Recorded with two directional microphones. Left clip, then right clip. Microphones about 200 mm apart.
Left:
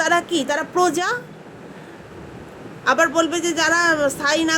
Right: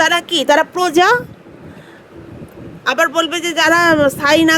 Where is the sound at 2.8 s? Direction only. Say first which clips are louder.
Right 2 dB; 40° right (ahead or behind).